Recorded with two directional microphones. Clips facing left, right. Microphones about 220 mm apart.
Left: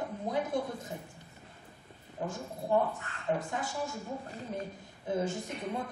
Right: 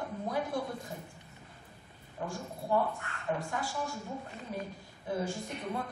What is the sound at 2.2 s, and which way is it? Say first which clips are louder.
Speech: left 2 dB; 15° left (ahead or behind).